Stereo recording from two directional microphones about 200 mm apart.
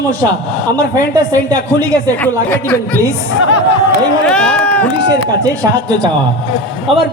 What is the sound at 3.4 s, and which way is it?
Speech, 80° left.